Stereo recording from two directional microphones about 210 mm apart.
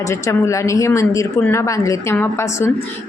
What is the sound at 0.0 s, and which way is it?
A woman's voice, 15° left (ahead or behind).